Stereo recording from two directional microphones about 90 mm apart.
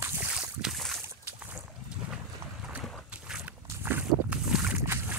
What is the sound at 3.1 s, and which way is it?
Boat, 15° right (ahead or behind).